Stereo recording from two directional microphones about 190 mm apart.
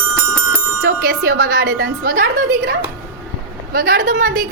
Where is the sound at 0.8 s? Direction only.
50° right (ahead or behind).